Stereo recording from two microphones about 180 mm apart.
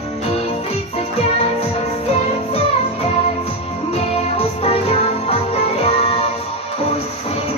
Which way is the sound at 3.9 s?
35° left (ahead or behind).